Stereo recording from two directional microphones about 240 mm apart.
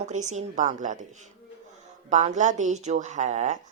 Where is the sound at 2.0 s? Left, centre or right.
Right.